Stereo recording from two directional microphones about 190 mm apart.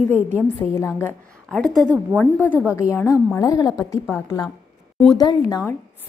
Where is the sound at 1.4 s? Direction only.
Centre (ahead or behind); by 3.7 s 15° left (ahead or behind).